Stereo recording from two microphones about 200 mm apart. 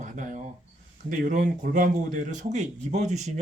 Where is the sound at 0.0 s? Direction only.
40° right (ahead or behind).